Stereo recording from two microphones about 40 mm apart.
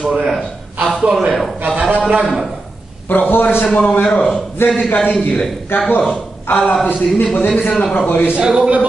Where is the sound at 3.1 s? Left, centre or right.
Left.